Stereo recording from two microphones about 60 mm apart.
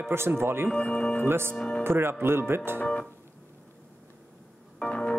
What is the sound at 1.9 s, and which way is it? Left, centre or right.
Speech, right.